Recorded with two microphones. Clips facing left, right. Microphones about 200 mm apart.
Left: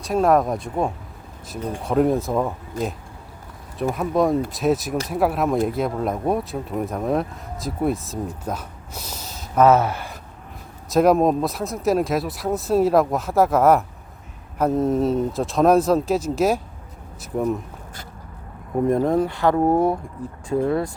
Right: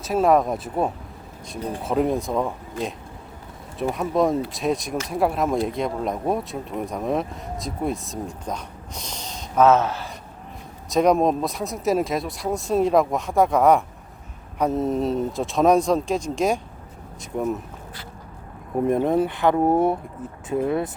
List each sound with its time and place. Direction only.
0.0 s speech: centre (ahead or behind)
3.8 s speech: centre (ahead or behind)
18.9 s speech: 20° right (ahead or behind)
19.5 s speech: 5° right (ahead or behind)
20.7 s speech: 20° right (ahead or behind)